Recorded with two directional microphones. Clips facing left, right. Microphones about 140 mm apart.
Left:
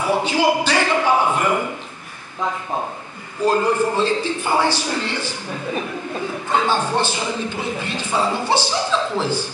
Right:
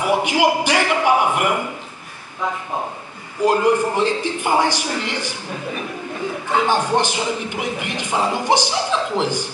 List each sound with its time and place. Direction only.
0.0 s a sound: 15° right (ahead or behind)
3.4 s a man's voice: 15° right (ahead or behind)
6.5 s a man's voice: 15° right (ahead or behind)